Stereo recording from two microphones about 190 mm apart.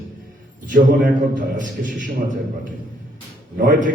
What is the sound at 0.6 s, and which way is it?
A man's voice, 45° right (ahead or behind).